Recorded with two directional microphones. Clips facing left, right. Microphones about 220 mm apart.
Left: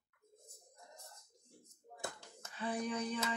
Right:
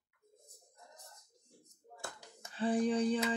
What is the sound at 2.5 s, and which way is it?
Speech, 30° right (ahead or behind).